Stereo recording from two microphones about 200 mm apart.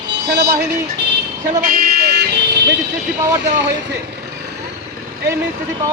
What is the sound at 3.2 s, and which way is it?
Speech, 15° right (ahead or behind).